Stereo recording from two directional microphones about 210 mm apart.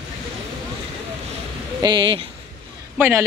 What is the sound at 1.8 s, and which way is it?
Speech, 20° right (ahead or behind).